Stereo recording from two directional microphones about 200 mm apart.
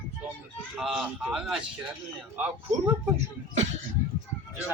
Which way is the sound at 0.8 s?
5° right (ahead or behind).